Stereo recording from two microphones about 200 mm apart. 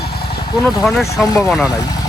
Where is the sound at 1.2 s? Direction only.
15° left (ahead or behind).